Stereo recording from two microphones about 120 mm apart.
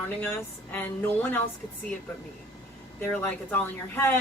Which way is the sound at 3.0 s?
15° left (ahead or behind).